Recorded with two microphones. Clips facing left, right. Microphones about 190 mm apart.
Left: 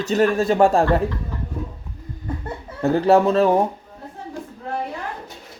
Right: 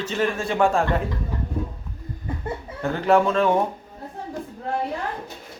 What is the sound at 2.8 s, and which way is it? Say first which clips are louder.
Speech: left 4 dB; 35° left (ahead or behind).